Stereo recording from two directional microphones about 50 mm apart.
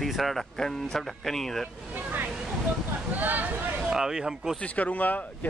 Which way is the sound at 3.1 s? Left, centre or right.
Right.